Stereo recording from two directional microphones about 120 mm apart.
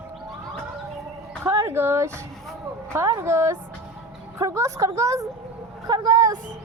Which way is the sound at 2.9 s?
25° right (ahead or behind).